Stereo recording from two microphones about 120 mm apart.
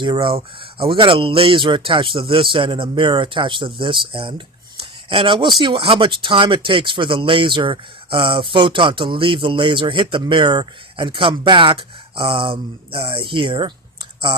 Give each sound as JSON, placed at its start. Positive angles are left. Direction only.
{"t": 0.0, "sound": "speech", "side_deg": -45}